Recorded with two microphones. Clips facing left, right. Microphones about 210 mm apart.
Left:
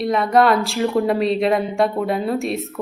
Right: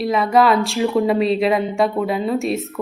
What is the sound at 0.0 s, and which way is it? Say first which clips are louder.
A woman's voice: even; centre (ahead or behind).